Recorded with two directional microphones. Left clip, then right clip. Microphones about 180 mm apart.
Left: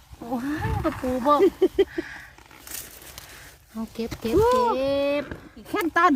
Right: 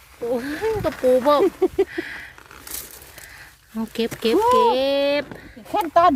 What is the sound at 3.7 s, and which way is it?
Speech, 35° right (ahead or behind).